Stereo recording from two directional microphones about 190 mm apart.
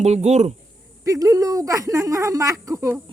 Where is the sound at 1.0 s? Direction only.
15° right (ahead or behind).